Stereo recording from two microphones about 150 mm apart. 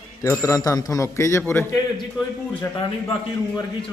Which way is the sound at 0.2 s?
20° left (ahead or behind).